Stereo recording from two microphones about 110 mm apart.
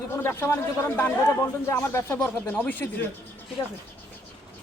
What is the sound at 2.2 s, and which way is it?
Speech, 10° left (ahead or behind).